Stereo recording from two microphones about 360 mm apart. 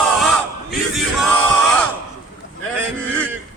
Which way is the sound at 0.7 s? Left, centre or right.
Centre.